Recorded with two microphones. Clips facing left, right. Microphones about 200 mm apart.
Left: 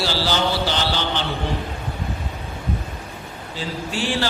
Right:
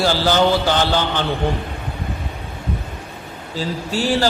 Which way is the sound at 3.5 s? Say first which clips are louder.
Right 4 dB; 40° right (ahead or behind).